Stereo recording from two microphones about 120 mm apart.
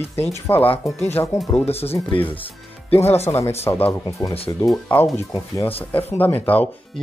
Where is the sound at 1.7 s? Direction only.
55° left (ahead or behind).